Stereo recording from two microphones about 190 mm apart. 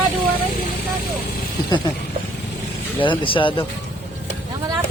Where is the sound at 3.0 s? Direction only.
25° left (ahead or behind).